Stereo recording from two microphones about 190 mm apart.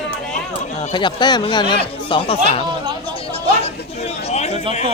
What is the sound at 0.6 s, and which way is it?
Speech, 40° left (ahead or behind).